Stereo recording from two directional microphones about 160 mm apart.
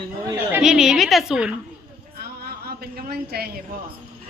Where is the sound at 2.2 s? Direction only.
70° right (ahead or behind).